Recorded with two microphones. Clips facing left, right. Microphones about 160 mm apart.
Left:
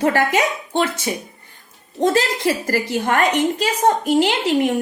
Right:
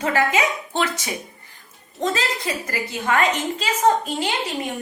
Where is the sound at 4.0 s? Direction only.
90° left.